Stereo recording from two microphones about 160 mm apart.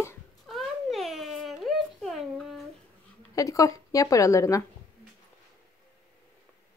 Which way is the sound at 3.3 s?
20° left (ahead or behind).